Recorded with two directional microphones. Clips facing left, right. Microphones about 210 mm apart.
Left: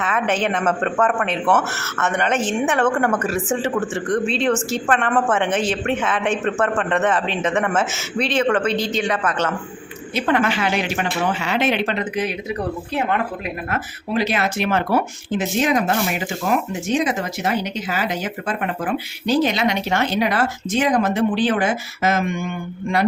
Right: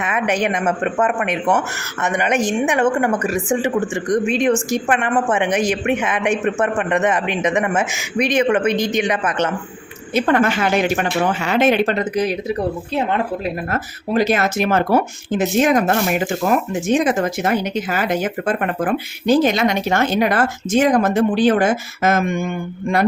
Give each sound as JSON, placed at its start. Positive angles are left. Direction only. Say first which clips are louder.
{"t": 0.0, "sound": "speech", "louder": "right 1 dB", "side_deg": -15}
{"t": 10.2, "sound": "speech", "louder": "right 3 dB", "side_deg": -45}
{"t": 13.7, "sound": "speech", "louder": "right 3 dB", "side_deg": -40}